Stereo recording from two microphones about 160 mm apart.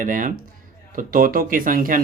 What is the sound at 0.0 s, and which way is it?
Speech, 55° right (ahead or behind).